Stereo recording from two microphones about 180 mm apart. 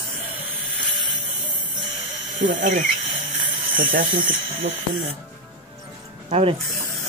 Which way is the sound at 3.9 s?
50° right (ahead or behind).